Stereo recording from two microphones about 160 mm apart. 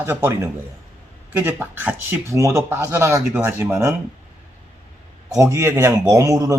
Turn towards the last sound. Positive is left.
turn(degrees=-20)  # may be behind; listen again after turning